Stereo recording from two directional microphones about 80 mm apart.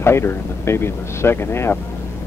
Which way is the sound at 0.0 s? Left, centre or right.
Left.